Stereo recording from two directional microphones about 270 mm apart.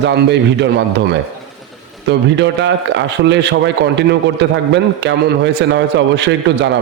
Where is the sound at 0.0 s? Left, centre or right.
Right.